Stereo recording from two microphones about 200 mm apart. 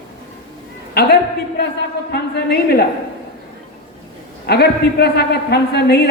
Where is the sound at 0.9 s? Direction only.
55° left (ahead or behind).